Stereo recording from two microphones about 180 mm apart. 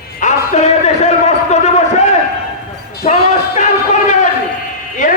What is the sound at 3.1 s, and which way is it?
Basketball bounce, 40° left (ahead or behind).